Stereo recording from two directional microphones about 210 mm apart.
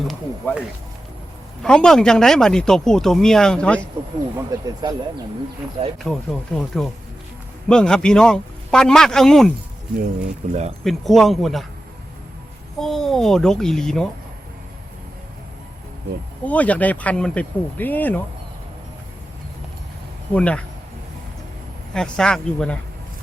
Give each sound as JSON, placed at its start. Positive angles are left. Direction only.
{"t": 0.0, "sound": "speech", "side_deg": 0}
{"t": 1.6, "sound": "speech", "side_deg": 5}
{"t": 4.4, "sound": "speech", "side_deg": -15}
{"t": 6.0, "sound": "speech", "side_deg": 0}
{"t": 10.5, "sound": "speech", "side_deg": -30}
{"t": 10.8, "sound": "speech", "side_deg": 0}
{"t": 12.8, "sound": "speech", "side_deg": 0}
{"t": 16.4, "sound": "speech", "side_deg": 5}
{"t": 20.3, "sound": "speech", "side_deg": 5}
{"t": 21.9, "sound": "speech", "side_deg": 5}